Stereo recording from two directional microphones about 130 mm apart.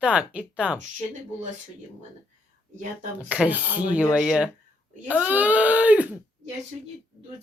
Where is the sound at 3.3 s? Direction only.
10° right (ahead or behind).